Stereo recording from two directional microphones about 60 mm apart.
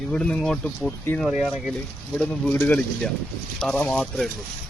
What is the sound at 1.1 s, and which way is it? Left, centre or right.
Speech, left.